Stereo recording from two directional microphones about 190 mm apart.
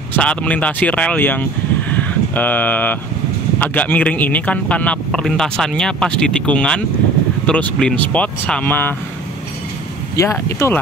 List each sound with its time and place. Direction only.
0.1 s speech: 5° left (ahead or behind)
10.1 s speech: 15° left (ahead or behind)